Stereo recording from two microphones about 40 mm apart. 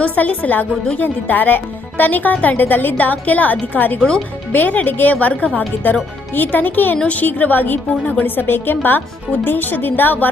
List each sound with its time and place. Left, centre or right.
0.0 s speech: left
5.2 s speech: left
6.3 s speech: left